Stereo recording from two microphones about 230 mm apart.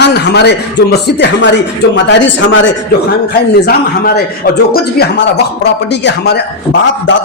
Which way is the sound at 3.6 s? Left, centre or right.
Left.